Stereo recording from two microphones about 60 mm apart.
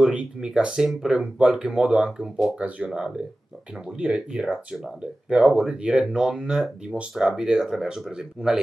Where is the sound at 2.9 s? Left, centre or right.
Centre.